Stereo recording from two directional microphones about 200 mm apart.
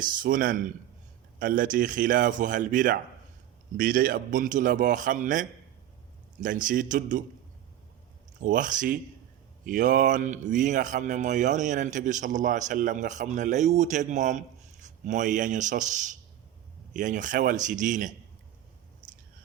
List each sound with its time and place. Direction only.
0.2 s a man's voice: 45° right (ahead or behind)
8.4 s speech: 40° right (ahead or behind)